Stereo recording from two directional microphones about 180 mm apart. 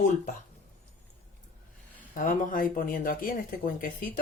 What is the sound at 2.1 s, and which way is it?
Speech, 50° left (ahead or behind).